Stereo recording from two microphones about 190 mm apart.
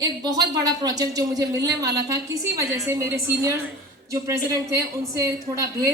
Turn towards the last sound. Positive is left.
turn(degrees=-15)  # may be behind; listen again after turning